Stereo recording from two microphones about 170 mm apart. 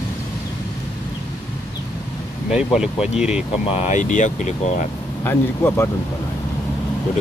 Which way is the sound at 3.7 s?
45° left (ahead or behind).